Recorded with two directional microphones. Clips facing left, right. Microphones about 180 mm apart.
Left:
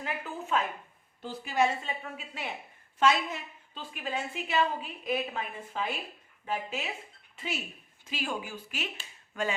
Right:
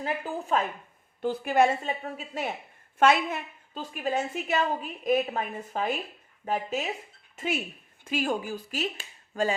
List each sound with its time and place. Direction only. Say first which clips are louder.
0.0 s speech: right 5 dB; 35° right (ahead or behind)
1.2 s a woman's voice: right 5 dB; 55° right (ahead or behind)
3.0 s a woman's voice: right 4 dB; 60° right (ahead or behind); by 6.9 s 40° right (ahead or behind)
7.3 s speech: right 6 dB; 55° right (ahead or behind); by 9.6 s 35° right (ahead or behind)